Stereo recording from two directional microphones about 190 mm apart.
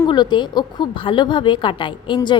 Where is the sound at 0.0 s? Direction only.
25° left (ahead or behind).